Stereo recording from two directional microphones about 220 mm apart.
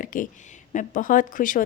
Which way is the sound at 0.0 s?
35° left (ahead or behind).